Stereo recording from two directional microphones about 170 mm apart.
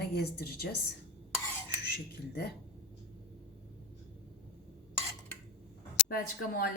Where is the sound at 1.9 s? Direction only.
70° left (ahead or behind).